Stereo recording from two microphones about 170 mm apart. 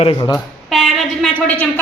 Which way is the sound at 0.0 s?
25° left (ahead or behind).